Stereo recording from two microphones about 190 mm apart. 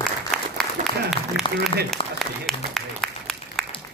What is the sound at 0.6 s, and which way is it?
Applause, 5° left (ahead or behind).